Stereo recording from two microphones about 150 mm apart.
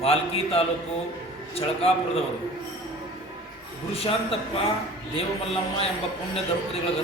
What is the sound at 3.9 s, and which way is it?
Speech, 40° left (ahead or behind).